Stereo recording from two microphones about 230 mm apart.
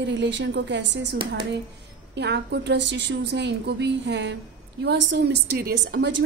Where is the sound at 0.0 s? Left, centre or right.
Right.